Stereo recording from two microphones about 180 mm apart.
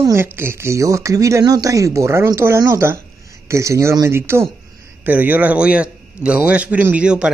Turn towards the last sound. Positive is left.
turn(degrees=-5)  # may be behind; listen again after turning